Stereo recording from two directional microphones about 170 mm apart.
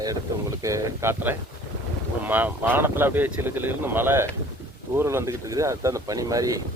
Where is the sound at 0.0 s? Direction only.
20° right (ahead or behind).